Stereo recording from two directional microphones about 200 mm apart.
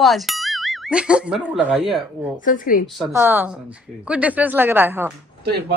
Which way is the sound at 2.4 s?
45° left (ahead or behind).